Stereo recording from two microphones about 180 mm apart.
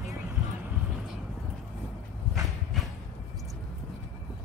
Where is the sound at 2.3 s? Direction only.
Centre (ahead or behind).